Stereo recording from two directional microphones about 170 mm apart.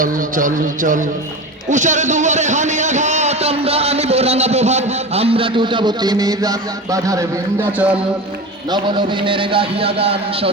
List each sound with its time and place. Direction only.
0.0 s a man's voice: 55° right (ahead or behind); by 7.9 s 10° right (ahead or behind)
8.7 s a man's voice: 25° right (ahead or behind)